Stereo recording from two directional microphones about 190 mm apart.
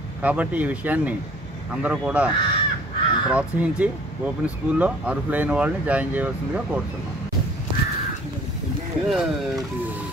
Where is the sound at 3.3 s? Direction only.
5° right (ahead or behind).